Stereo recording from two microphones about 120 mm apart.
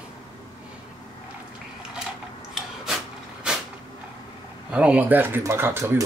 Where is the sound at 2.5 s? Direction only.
5° right (ahead or behind).